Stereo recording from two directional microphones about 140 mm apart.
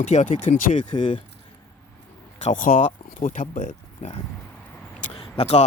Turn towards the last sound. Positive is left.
turn(degrees=45)  # may be behind; listen again after turning